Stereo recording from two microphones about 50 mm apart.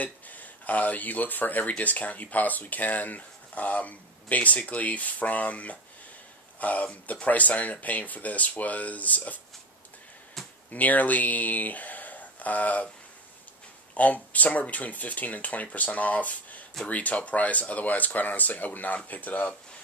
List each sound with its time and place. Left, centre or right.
0.0 s speech: left
10.4 s a sound: centre
10.7 s speech: left
13.9 s speech: left